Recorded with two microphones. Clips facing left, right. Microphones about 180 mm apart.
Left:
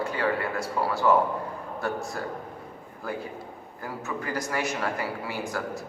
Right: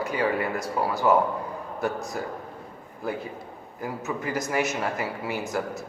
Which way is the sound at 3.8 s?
20° right (ahead or behind).